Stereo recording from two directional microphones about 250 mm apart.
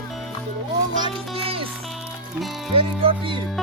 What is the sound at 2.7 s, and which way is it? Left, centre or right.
Music, right.